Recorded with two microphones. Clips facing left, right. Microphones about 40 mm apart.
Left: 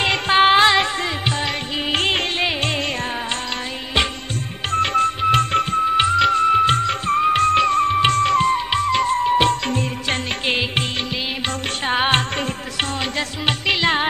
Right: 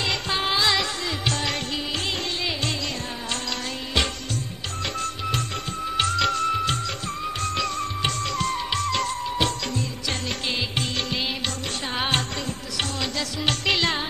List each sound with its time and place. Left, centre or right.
0.0 s music: left
1.9 s music: left
4.7 s music: left
5.9 s music: left
6.5 s music: left
9.1 s music: left
11.9 s music: left
13.5 s music: centre